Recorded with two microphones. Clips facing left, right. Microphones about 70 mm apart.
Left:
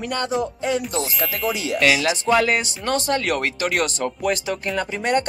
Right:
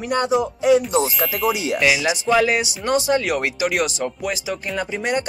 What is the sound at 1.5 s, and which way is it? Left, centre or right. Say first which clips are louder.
Speech: even; centre.